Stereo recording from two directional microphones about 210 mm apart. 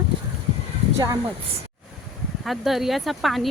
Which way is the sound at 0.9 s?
15° right (ahead or behind).